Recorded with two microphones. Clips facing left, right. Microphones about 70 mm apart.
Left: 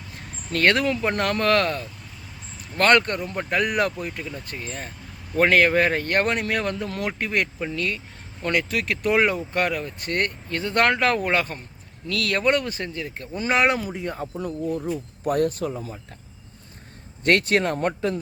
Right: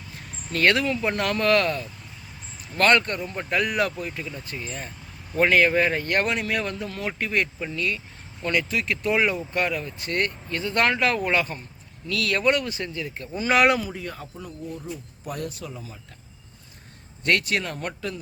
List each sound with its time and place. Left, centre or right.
0.5 s speech: left
6.8 s speech: left
7.2 s speech: left
13.5 s speech: left
14.2 s speech: left
17.2 s speech: left